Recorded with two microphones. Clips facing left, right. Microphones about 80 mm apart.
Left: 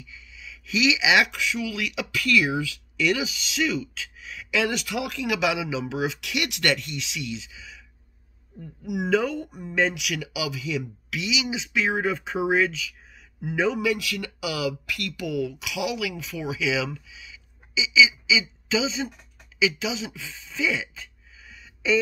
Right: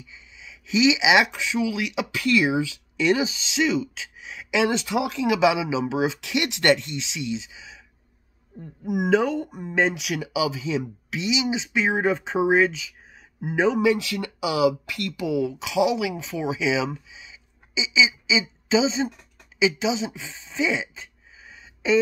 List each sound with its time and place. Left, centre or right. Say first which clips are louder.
0.0 s speech: left 1 dB; right